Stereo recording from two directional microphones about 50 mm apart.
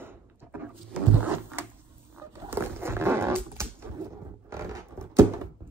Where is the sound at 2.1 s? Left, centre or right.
Right.